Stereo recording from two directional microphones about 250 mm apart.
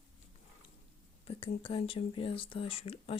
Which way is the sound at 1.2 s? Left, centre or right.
Left.